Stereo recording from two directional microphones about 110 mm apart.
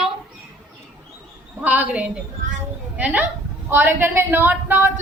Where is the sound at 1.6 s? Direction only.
15° right (ahead or behind).